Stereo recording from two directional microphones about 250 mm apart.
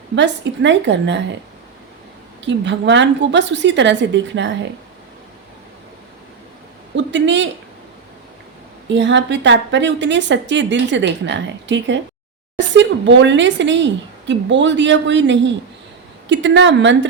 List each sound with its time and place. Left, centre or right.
0.2 s a woman's voice: right
2.4 s a woman's voice: right
6.9 s speech: right
8.9 s a woman's voice: right